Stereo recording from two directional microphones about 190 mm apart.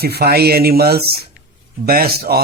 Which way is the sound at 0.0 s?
55° right (ahead or behind).